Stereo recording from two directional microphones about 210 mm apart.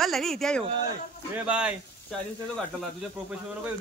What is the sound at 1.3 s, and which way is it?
Speech, 5° right (ahead or behind).